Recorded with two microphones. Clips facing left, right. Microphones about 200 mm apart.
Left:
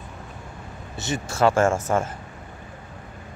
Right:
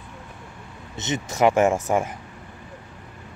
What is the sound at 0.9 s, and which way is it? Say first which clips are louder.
Speech: right 1 dB; 20° right (ahead or behind).